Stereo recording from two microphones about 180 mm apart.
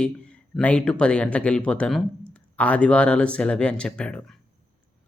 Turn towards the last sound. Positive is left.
turn(degrees=5)  # may be behind; listen again after turning